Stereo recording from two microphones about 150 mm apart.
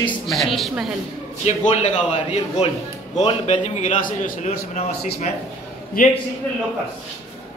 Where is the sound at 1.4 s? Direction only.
50° left (ahead or behind).